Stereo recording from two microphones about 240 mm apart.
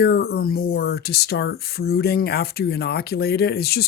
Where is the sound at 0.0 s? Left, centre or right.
Left.